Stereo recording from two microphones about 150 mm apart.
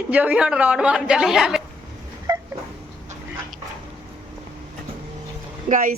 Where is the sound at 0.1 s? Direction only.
10° right (ahead or behind).